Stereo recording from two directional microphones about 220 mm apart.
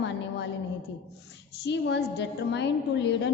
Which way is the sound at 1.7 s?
50° left (ahead or behind).